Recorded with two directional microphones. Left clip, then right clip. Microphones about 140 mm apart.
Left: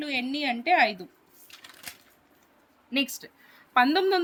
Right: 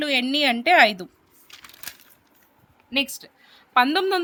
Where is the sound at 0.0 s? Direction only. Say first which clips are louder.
Right 8 dB; 50° right (ahead or behind).